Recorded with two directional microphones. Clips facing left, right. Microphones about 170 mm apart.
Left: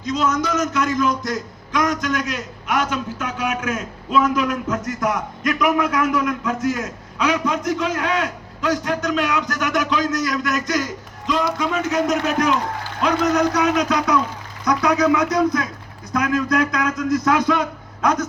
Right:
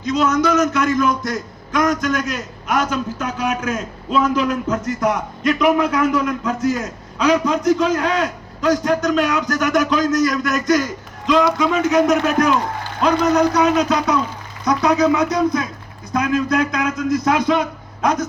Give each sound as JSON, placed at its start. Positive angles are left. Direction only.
{"t": 0.0, "sound": "a man's voice", "side_deg": -65}
{"t": 11.3, "sound": "speech", "side_deg": -90}
{"t": 13.0, "sound": "a man's voice", "side_deg": -35}